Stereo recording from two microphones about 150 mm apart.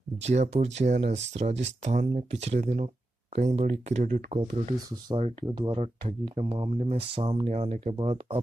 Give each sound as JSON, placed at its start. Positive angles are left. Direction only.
{"t": 0.2, "sound": "speech", "side_deg": -50}
{"t": 5.1, "sound": "speech", "side_deg": -35}